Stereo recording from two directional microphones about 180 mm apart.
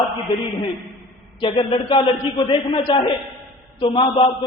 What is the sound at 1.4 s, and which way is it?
A man's voice, 30° left (ahead or behind).